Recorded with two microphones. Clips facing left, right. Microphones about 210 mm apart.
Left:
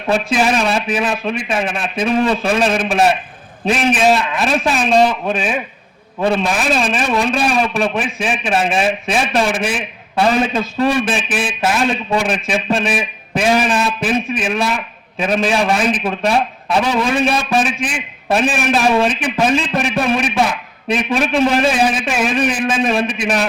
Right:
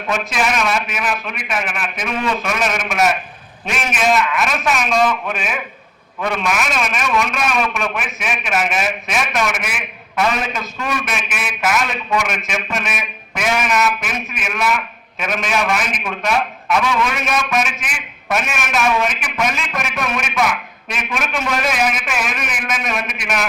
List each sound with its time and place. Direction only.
0.1 s a man's voice: 30° left (ahead or behind)